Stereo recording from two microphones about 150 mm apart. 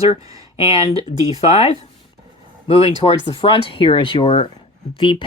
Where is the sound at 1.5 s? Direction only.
40° left (ahead or behind).